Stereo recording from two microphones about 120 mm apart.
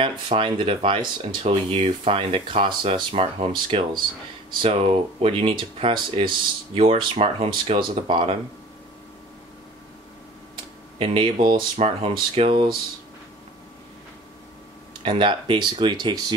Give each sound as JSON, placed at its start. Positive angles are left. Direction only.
{"t": 0.0, "sound": "speech", "side_deg": -45}
{"t": 11.0, "sound": "speech", "side_deg": -50}
{"t": 15.0, "sound": "speech", "side_deg": -45}